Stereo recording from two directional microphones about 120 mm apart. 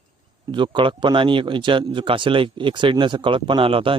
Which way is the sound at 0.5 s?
40° right (ahead or behind).